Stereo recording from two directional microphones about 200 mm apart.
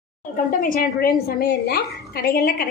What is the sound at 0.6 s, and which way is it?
A woman's voice, 45° left (ahead or behind).